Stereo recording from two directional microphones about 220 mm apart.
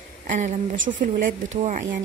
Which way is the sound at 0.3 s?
35° right (ahead or behind).